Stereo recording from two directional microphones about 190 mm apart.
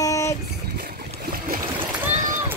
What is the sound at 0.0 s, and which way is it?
Boat, 15° left (ahead or behind).